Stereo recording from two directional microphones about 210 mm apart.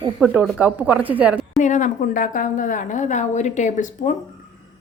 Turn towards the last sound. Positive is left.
turn(degrees=35)  # may be behind; listen again after turning